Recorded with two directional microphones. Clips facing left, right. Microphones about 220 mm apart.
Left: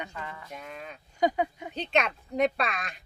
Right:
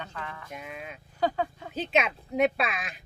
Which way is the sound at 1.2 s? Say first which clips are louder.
Left 2 dB; 15° left (ahead or behind).